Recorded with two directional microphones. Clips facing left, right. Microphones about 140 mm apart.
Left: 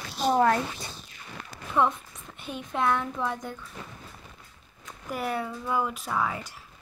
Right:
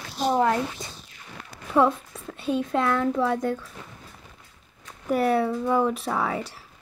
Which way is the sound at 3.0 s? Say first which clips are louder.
Right 8 dB; 80° right.